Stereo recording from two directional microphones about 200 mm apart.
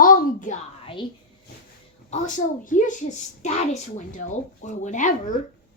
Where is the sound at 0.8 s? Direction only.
25° left (ahead or behind).